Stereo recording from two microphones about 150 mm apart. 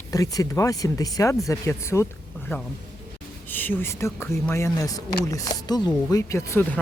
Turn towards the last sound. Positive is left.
turn(degrees=15)  # may be behind; listen again after turning